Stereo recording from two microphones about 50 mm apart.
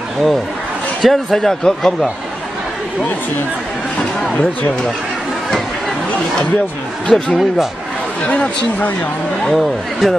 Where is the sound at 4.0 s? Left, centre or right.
Left.